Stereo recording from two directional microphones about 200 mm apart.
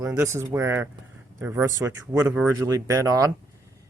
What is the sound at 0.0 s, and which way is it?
Speech, 15° right (ahead or behind).